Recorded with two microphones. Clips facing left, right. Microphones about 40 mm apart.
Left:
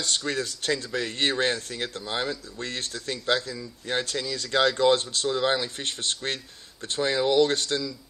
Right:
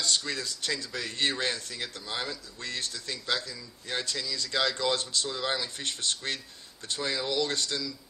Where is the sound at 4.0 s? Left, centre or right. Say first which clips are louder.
Left 4 dB; left.